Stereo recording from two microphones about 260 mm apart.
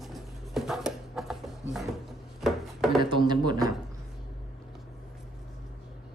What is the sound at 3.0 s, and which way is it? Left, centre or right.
Speech, centre.